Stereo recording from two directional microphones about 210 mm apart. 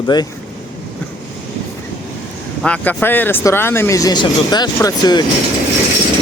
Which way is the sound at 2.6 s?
5° left (ahead or behind).